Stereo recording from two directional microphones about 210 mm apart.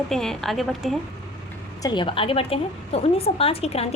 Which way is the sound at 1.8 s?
25° left (ahead or behind).